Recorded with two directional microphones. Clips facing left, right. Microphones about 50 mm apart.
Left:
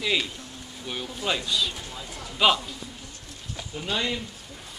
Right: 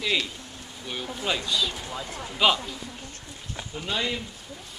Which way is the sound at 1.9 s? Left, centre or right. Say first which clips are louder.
Right 4 dB; right.